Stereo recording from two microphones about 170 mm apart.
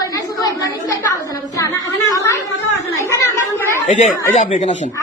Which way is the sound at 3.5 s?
15° left (ahead or behind).